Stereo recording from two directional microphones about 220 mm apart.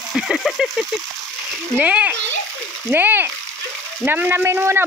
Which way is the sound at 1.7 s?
5° right (ahead or behind).